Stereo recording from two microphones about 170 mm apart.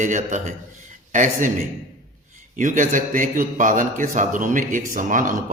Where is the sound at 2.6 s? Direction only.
45° right (ahead or behind).